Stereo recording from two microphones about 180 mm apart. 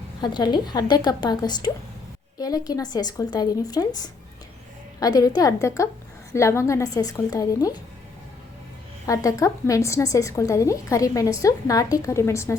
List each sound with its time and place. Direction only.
0.2 s speech: 25° left (ahead or behind)
9.0 s a woman's voice: 20° left (ahead or behind)